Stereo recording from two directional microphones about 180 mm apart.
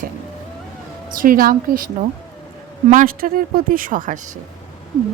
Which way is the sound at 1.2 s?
50° right (ahead or behind).